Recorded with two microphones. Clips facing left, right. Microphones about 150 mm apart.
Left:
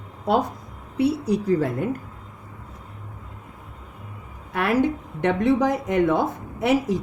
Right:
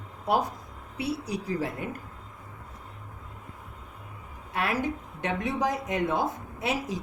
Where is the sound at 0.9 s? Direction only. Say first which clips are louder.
Left 10 dB; 60° left (ahead or behind).